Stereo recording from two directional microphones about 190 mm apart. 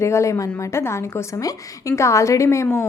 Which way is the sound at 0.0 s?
15° left (ahead or behind).